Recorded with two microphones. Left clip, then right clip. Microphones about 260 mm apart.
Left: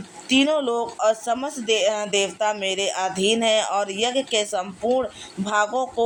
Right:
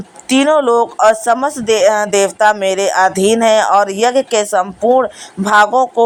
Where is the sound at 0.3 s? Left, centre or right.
Right.